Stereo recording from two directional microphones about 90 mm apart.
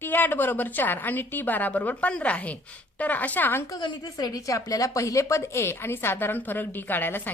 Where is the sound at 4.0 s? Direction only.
45° left (ahead or behind).